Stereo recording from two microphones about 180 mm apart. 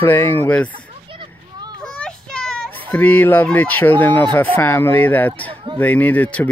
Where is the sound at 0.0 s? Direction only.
10° left (ahead or behind).